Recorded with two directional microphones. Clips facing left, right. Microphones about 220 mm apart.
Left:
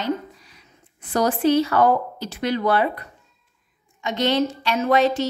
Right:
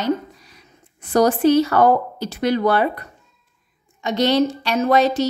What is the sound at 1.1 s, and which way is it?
A woman's voice, 40° right (ahead or behind).